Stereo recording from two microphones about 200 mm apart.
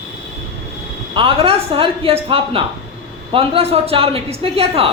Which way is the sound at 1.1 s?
25° right (ahead or behind).